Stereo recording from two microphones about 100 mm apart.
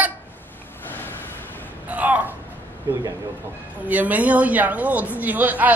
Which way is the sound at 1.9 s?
15° right (ahead or behind).